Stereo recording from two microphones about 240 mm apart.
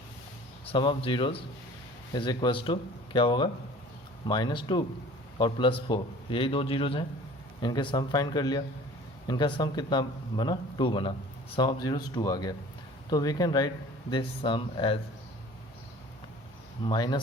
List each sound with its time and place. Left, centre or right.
0.7 s speech: left
16.8 s speech: centre